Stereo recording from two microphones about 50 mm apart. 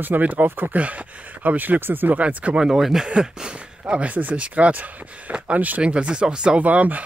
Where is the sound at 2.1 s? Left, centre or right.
Right.